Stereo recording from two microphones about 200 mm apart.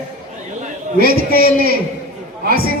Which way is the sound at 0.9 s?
45° right (ahead or behind).